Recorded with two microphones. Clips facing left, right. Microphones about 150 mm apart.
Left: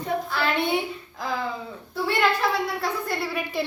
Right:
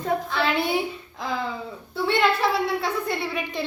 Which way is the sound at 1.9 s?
Centre (ahead or behind).